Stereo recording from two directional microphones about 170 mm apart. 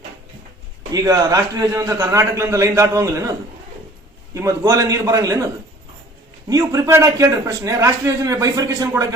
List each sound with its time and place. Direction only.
0.9 s a man's voice: 20° right (ahead or behind)
4.4 s a man's voice: 20° right (ahead or behind)
6.5 s a man's voice: 20° right (ahead or behind)